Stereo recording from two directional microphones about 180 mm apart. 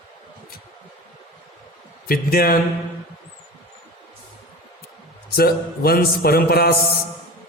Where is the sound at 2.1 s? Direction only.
55° left (ahead or behind).